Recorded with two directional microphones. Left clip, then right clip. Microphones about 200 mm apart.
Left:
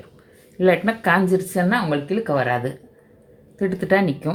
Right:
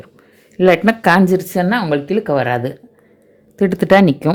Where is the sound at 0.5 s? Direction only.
50° right (ahead or behind).